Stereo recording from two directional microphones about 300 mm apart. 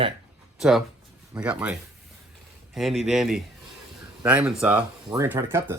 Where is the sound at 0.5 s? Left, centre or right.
Centre.